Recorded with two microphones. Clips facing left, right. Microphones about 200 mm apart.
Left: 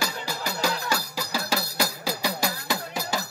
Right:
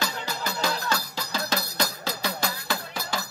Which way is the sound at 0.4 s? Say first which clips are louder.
Left 1 dB; 15° left (ahead or behind).